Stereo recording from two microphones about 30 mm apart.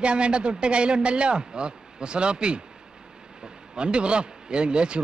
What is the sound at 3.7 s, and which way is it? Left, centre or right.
A man's voice, right.